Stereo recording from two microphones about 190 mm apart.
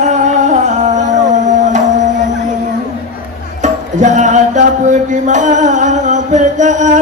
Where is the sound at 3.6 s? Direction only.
40° right (ahead or behind).